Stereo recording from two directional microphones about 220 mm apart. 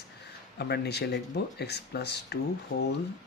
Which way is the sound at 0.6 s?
50° left (ahead or behind).